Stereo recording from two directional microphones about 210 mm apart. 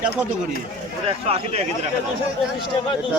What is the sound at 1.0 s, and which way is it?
Speech, 30° right (ahead or behind).